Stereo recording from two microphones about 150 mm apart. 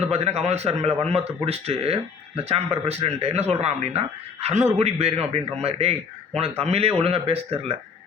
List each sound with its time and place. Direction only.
0.1 s speech: 45° right (ahead or behind)